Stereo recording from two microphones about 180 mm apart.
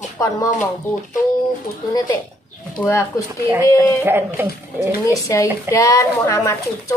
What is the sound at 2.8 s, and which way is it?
Speech, 15° left (ahead or behind).